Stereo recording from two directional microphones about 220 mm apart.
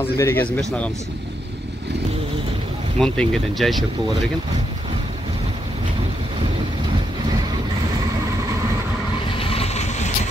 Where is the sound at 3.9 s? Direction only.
20° right (ahead or behind).